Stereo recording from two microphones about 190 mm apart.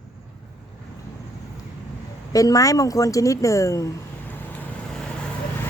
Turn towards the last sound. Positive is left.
turn(degrees=15)  # may be behind; listen again after turning